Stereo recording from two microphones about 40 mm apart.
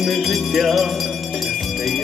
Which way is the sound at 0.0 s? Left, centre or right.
Centre.